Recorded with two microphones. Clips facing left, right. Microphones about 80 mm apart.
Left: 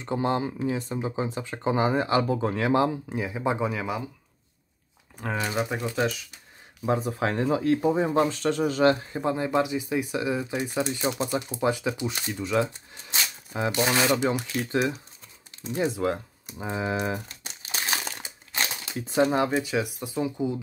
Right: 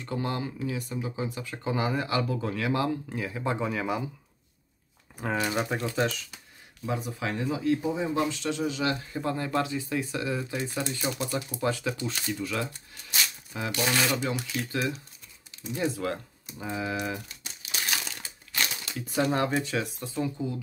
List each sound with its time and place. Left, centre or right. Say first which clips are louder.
0.0 s speech: left 5 dB; left; by 4.0 s centre
5.1 s speech: even; centre
6.9 s speech: left 6 dB; left
9.0 s speech: left 4 dB; left
14.3 s speech: left 3 dB; centre
14.7 s speech: left 7 dB; left
17.3 s crumpling: left 2 dB; left
18.2 s crumpling: left 1 dB; left
19.5 s speech: left 3 dB; centre